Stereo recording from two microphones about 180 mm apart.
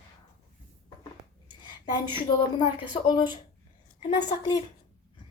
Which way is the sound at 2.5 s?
25° left (ahead or behind).